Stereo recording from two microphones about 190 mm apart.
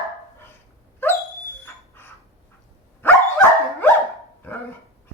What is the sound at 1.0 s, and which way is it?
Dog, 10° left (ahead or behind).